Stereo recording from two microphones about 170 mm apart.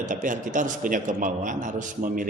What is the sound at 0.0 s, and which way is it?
A man's voice, 50° right (ahead or behind).